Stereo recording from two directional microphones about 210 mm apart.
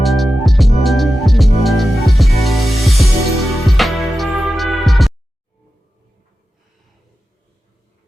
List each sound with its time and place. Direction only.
0.0 s music: centre (ahead or behind)